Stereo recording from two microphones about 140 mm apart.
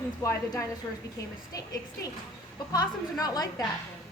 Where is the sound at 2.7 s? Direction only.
25° left (ahead or behind).